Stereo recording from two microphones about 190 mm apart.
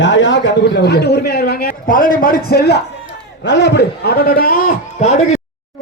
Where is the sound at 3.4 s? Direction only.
70° left (ahead or behind).